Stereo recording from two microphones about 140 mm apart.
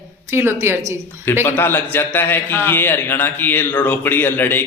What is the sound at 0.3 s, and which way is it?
Speech, 20° right (ahead or behind).